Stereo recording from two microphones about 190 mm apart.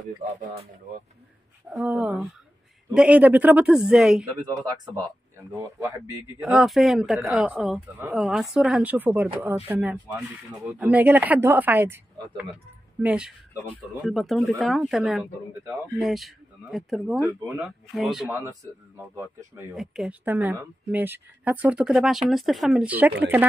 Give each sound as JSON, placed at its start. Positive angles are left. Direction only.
{"t": 1.7, "sound": "speech", "side_deg": -5}
{"t": 4.5, "sound": "speech", "side_deg": -20}
{"t": 6.4, "sound": "speech", "side_deg": 0}
{"t": 18.9, "sound": "speech", "side_deg": -10}
{"t": 19.7, "sound": "speech", "side_deg": 0}